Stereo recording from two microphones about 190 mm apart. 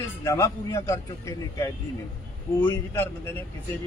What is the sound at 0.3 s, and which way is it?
A man's voice, 15° left (ahead or behind).